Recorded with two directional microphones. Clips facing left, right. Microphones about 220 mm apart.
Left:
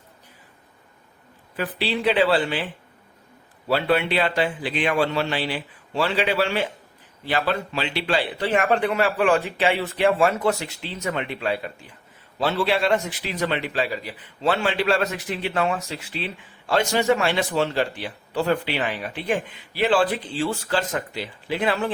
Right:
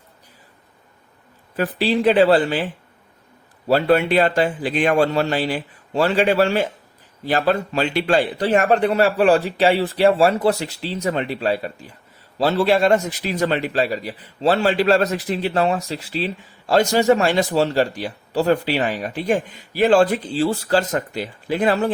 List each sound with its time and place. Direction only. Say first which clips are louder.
1.5 s a man's voice: right 6 dB; 40° right (ahead or behind)
3.7 s a man's voice: right 5 dB; 45° right (ahead or behind)